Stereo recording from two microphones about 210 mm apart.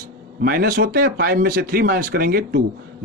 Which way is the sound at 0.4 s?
45° right (ahead or behind).